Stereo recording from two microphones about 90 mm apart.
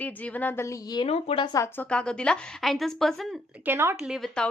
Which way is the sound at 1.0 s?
85° left.